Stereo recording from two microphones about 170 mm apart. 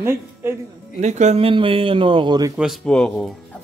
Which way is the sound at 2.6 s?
Centre (ahead or behind).